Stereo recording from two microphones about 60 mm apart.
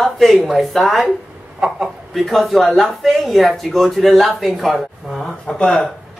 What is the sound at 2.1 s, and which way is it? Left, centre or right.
Speech, centre.